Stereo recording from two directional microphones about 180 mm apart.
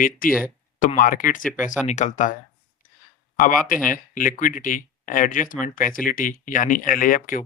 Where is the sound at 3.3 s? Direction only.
50° left (ahead or behind).